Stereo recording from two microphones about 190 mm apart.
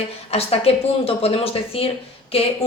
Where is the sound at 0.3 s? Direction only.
30° left (ahead or behind).